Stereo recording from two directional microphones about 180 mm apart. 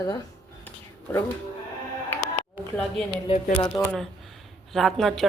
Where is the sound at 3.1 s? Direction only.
30° left (ahead or behind).